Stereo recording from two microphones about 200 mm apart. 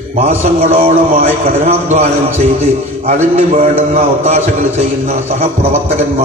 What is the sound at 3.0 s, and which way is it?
A man's voice, 30° right (ahead or behind).